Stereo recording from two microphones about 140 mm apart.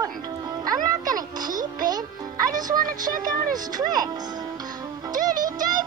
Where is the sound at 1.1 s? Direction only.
30° right (ahead or behind).